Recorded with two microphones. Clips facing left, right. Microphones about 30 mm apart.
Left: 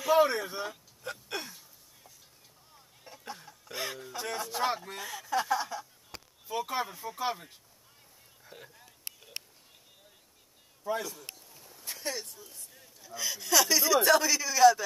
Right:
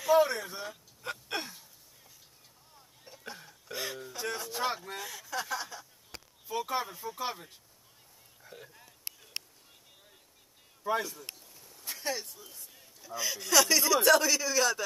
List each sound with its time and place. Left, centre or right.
0.0 s speech: centre
1.3 s a sound: centre
2.7 s a sound: centre
3.3 s cough: centre
3.7 s speech: centre
10.9 s a man's voice: right
11.3 s speech: centre